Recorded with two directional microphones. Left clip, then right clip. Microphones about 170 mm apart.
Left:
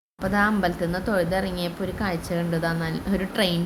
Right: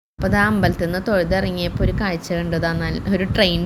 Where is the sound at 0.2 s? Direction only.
15° right (ahead or behind).